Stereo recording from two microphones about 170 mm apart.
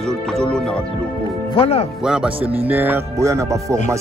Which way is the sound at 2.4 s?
35° right (ahead or behind).